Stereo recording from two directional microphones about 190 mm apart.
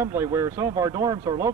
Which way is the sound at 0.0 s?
10° right (ahead or behind).